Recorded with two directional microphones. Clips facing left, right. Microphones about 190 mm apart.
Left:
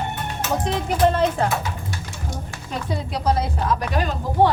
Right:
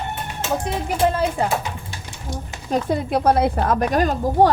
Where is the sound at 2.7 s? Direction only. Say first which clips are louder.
Right 7 dB; 55° right (ahead or behind).